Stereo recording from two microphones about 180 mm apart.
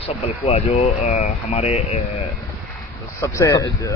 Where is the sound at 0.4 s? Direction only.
35° left (ahead or behind).